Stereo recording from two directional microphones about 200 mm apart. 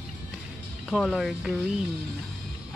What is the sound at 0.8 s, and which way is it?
Speech, centre (ahead or behind).